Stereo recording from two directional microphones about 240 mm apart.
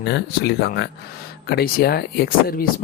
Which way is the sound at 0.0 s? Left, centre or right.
Left.